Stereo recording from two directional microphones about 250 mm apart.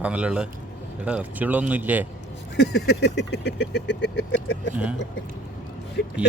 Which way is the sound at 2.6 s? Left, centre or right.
Left.